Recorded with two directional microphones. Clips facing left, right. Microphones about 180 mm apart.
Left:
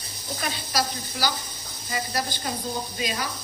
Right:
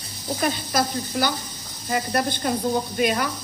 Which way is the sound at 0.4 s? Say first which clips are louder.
Right 5 dB; 50° right (ahead or behind).